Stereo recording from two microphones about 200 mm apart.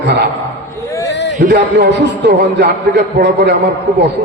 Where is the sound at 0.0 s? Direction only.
60° right (ahead or behind).